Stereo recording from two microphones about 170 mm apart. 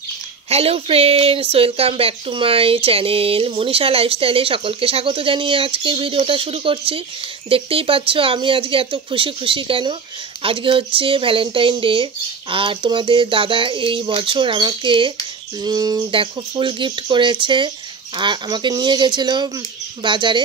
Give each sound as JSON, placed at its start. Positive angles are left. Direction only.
{"t": 0.5, "sound": "speech", "side_deg": -35}